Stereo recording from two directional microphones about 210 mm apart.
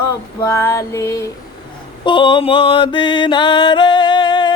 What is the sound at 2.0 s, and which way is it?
Music, 20° left (ahead or behind).